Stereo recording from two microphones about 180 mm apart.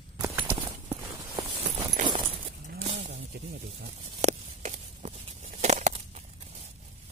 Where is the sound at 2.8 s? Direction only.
35° right (ahead or behind).